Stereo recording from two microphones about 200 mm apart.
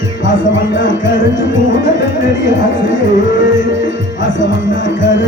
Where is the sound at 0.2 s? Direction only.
65° left (ahead or behind).